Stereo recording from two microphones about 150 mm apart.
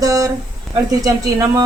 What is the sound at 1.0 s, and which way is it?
Speech, 20° right (ahead or behind).